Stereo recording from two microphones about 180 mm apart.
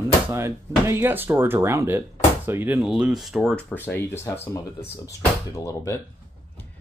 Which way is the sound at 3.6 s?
10° left (ahead or behind).